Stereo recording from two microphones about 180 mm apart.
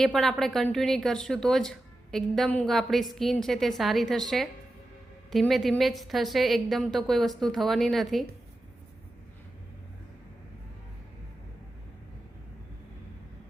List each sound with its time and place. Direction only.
0.0 s a woman's voice: centre (ahead or behind)